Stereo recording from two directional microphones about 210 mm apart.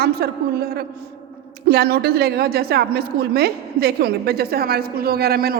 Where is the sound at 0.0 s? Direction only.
45° right (ahead or behind).